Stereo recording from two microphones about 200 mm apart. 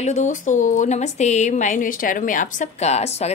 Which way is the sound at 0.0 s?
35° left (ahead or behind).